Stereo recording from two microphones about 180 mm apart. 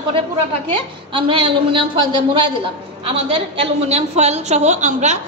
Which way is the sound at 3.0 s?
30° right (ahead or behind).